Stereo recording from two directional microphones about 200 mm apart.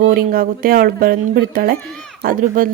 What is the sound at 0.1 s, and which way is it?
A woman's voice, 45° right (ahead or behind).